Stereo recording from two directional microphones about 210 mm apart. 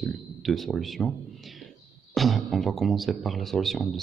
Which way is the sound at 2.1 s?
Centre (ahead or behind).